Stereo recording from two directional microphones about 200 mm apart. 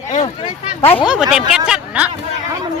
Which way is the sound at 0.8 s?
30° left (ahead or behind).